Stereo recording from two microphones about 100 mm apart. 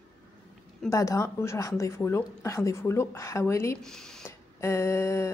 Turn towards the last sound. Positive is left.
turn(degrees=25)  # may be behind; listen again after turning